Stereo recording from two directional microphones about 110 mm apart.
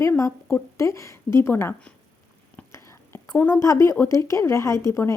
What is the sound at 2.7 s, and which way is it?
Whispering, 25° left (ahead or behind).